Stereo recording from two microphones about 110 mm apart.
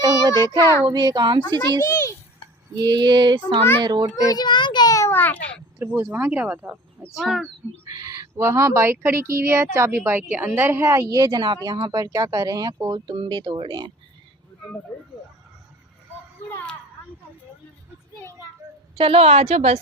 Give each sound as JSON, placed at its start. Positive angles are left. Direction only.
{"t": 0.0, "sound": "child singing", "side_deg": -40}
{"t": 0.9, "sound": "speech", "side_deg": -40}
{"t": 1.8, "sound": "a sound", "side_deg": 30}
{"t": 2.7, "sound": "child singing", "side_deg": -40}
{"t": 3.8, "sound": "speech", "side_deg": -40}
{"t": 4.1, "sound": "a sound", "side_deg": 35}
{"t": 5.1, "sound": "babbling", "side_deg": 15}
{"t": 5.8, "sound": "speech", "side_deg": -20}
{"t": 7.1, "sound": "speech", "side_deg": 0}
{"t": 7.9, "sound": "speech", "side_deg": -35}
{"t": 18.6, "sound": "a sound", "side_deg": -25}
{"t": 18.9, "sound": "a woman's voice", "side_deg": -60}